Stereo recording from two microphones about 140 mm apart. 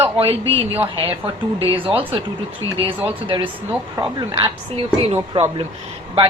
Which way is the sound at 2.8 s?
35° right (ahead or behind).